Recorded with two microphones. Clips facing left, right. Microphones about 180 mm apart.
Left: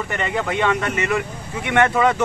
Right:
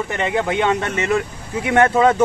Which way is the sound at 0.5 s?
25° right (ahead or behind).